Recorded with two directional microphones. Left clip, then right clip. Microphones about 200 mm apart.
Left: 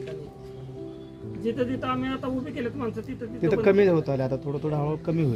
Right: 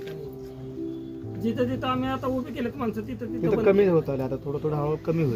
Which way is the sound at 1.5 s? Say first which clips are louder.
Right 3 dB; 60° right (ahead or behind).